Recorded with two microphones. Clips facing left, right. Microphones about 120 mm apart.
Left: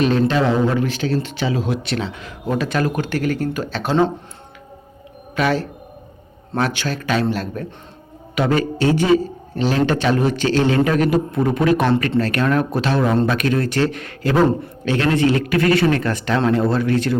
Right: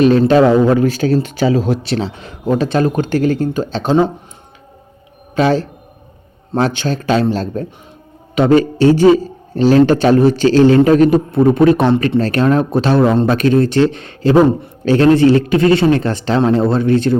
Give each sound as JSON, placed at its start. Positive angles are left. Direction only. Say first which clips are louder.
{"t": 0.0, "sound": "a man's voice", "louder": "right 7 dB", "side_deg": -40}
{"t": 5.3, "sound": "a man's voice", "louder": "right 5 dB", "side_deg": -30}